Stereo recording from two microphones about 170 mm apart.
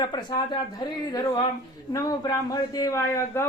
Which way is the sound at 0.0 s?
25° left (ahead or behind).